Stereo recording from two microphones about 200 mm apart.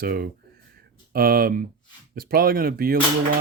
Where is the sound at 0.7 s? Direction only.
50° right (ahead or behind).